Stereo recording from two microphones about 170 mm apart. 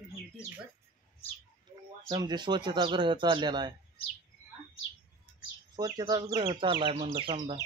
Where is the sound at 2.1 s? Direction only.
25° right (ahead or behind).